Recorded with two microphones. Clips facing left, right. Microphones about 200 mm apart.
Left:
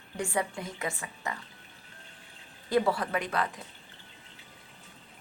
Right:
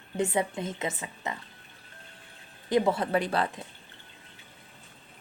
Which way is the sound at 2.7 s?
20° right (ahead or behind).